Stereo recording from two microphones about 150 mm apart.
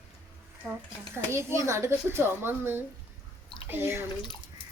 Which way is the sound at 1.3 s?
15° right (ahead or behind).